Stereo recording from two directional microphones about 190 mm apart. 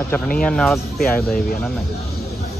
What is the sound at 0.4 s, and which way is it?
Speech, 5° left (ahead or behind).